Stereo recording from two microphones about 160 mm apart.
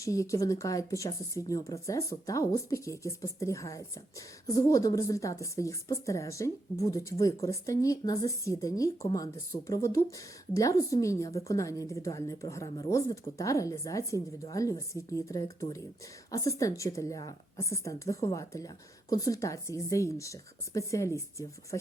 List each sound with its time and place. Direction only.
0.0 s a woman's voice: 20° left (ahead or behind)